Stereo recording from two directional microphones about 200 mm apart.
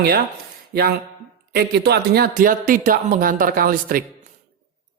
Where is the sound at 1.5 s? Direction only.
55° right (ahead or behind).